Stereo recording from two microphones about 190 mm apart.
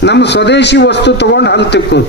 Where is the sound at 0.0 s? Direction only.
65° left (ahead or behind).